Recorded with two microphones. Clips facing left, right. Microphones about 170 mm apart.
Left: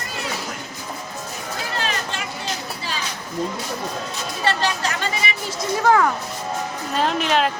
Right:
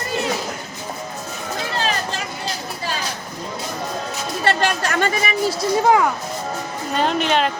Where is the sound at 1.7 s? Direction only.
35° right (ahead or behind).